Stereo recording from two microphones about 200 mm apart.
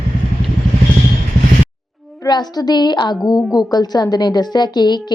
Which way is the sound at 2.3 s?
20° left (ahead or behind).